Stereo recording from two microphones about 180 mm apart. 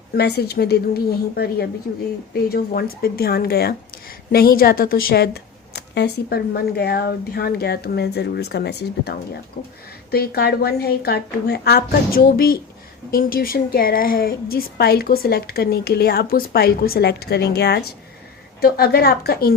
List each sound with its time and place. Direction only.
0.1 s speech: 65° left (ahead or behind)